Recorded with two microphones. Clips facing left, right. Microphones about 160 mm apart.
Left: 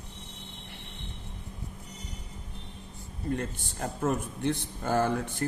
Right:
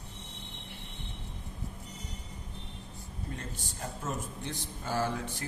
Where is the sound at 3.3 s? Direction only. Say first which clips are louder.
Left 11 dB; 60° left (ahead or behind).